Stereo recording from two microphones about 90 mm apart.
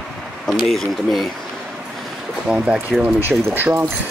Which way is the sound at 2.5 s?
10° right (ahead or behind).